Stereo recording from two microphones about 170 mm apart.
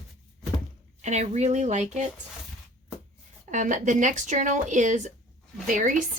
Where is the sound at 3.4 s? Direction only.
45° right (ahead or behind).